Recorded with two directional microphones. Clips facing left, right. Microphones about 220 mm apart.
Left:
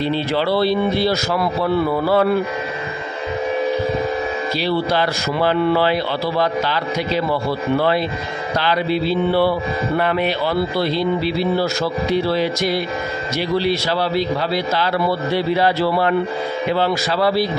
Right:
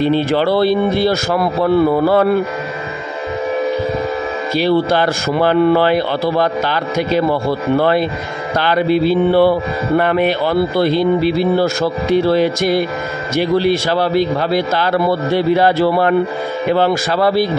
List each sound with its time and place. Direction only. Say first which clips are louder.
0.0 s music: right 5 dB; 50° right (ahead or behind)
4.6 s music: right 6 dB; 50° right (ahead or behind)